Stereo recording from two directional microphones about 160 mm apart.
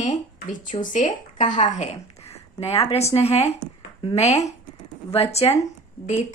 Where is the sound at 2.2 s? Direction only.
40° left (ahead or behind).